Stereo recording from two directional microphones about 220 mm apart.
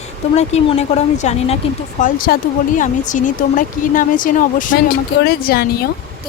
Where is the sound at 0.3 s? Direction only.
30° left (ahead or behind).